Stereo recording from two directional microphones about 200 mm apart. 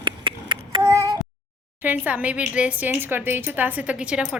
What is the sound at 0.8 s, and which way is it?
Child singing, 15° right (ahead or behind).